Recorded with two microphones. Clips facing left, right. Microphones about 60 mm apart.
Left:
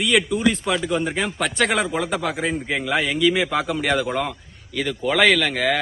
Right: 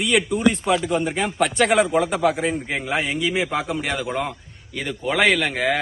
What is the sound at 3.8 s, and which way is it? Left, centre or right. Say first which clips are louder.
Speech: left 3 dB; centre.